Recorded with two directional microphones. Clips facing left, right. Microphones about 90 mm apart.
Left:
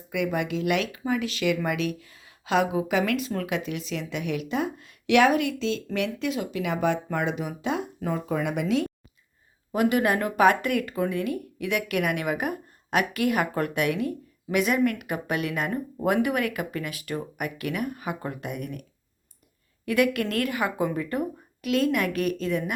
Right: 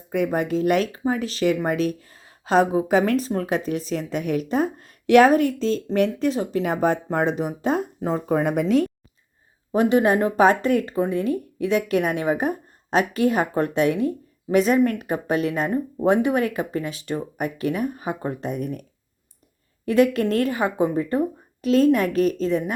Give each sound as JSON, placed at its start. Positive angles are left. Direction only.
{"t": 0.1, "sound": "speech", "side_deg": -40}
{"t": 9.7, "sound": "speech", "side_deg": -30}